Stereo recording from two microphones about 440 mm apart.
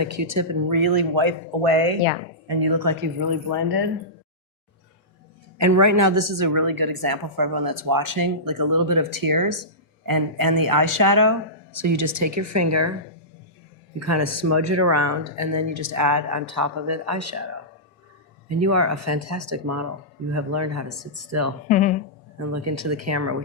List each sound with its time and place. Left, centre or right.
0.0 s speech: right
1.1 s speech: right
2.5 s a woman's voice: right
5.5 s a woman's voice: right
14.0 s speech: right
18.4 s speech: right
21.7 s speech: centre
22.4 s speech: right